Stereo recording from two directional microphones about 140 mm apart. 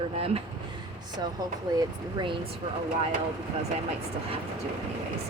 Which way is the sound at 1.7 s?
30° right (ahead or behind).